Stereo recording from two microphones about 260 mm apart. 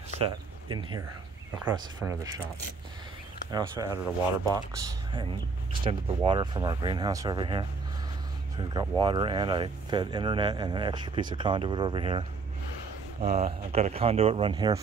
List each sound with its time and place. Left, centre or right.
0.1 s speech: centre
3.5 s speech: centre
5.7 s speech: centre